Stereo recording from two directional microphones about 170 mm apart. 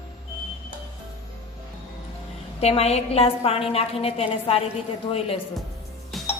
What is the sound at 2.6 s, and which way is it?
A woman's voice, 40° left (ahead or behind).